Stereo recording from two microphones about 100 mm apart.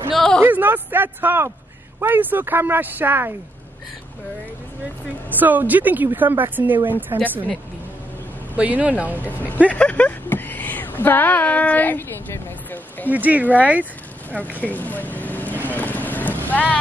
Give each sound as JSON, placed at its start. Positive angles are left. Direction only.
{"t": 0.1, "sound": "a sound", "side_deg": 5}
{"t": 0.4, "sound": "a sound", "side_deg": -20}
{"t": 2.0, "sound": "speech", "side_deg": -20}
{"t": 5.4, "sound": "speech", "side_deg": -20}
{"t": 8.5, "sound": "speech", "side_deg": -15}
{"t": 9.7, "sound": "a sound", "side_deg": 15}
{"t": 13.1, "sound": "speech", "side_deg": -15}
{"t": 14.6, "sound": "vehicle", "side_deg": 15}
{"t": 16.4, "sound": "boat", "side_deg": 15}